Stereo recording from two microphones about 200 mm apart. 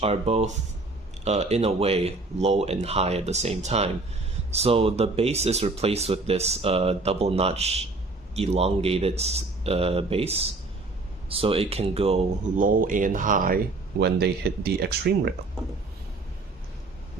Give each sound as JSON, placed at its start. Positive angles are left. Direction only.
{"t": 0.0, "sound": "speech", "side_deg": -30}
{"t": 14.0, "sound": "speech", "side_deg": -55}